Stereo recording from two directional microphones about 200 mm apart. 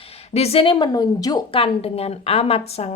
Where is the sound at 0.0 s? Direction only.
30° left (ahead or behind).